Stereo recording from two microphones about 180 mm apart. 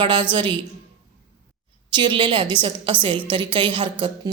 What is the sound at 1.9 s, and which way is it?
A woman's voice, 25° right (ahead or behind).